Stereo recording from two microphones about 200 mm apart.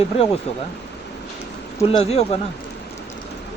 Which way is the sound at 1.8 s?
30° left (ahead or behind).